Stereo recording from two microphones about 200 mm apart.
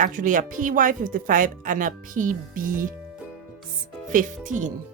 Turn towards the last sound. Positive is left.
turn(degrees=-40)  # may be behind; listen again after turning